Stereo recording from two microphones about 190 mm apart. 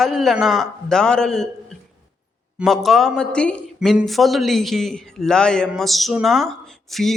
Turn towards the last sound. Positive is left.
turn(degrees=0)  # may be behind; listen again after turning